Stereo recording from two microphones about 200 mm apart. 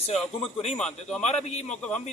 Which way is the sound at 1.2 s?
35° left (ahead or behind).